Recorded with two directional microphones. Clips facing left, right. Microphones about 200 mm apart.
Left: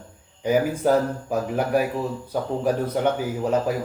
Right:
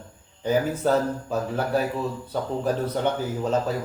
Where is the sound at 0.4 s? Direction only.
10° left (ahead or behind).